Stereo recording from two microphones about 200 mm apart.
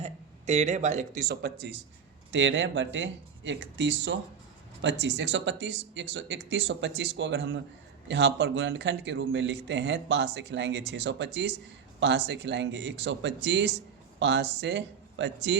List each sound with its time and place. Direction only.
0.0 s speech: 35° right (ahead or behind)
1.4 s speech: 50° right (ahead or behind)
2.3 s speech: 65° right (ahead or behind)